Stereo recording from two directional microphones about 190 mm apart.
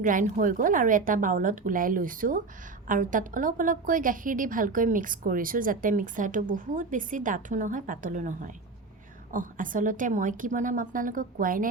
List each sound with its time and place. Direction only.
0.0 s a woman's voice: 45° right (ahead or behind)